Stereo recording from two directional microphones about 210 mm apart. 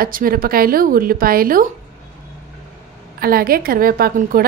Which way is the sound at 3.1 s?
45° right (ahead or behind).